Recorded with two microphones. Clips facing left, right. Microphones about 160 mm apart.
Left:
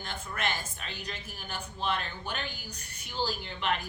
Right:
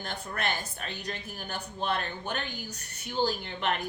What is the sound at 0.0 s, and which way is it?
A woman's voice, 40° right (ahead or behind).